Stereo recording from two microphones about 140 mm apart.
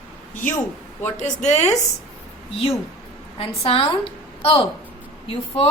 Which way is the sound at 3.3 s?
45° left (ahead or behind).